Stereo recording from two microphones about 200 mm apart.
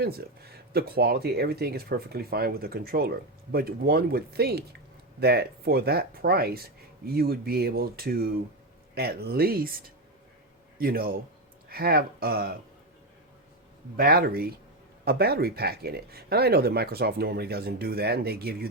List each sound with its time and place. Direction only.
0.0 s a man's voice: 50° right (ahead or behind)
13.9 s speech: 50° right (ahead or behind)